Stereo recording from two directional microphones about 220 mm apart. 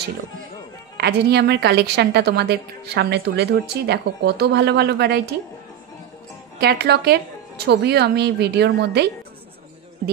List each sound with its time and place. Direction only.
0.9 s a woman's voice: 50° right (ahead or behind)
6.6 s a woman's voice: 50° right (ahead or behind)